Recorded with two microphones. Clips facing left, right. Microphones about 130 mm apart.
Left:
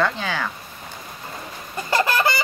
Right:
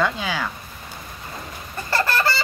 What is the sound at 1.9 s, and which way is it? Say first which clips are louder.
Chicken: left 2 dB; 15° left (ahead or behind).